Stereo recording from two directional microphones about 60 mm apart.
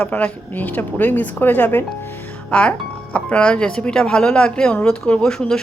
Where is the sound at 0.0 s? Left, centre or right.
Left.